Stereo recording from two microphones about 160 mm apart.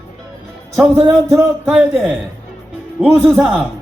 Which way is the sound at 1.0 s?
15° right (ahead or behind).